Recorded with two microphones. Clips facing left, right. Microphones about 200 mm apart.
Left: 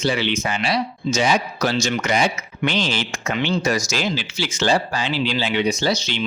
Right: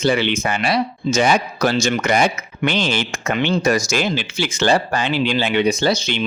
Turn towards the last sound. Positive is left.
turn(degrees=-55)  # may be behind; listen again after turning